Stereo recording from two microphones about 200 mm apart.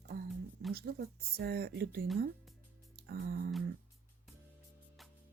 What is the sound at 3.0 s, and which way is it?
Speech, 50° right (ahead or behind).